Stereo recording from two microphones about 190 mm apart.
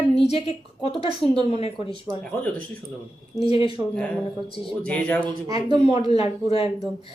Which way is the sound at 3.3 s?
30° left (ahead or behind).